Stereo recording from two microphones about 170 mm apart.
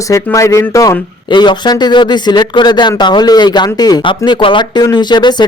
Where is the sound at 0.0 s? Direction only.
20° left (ahead or behind).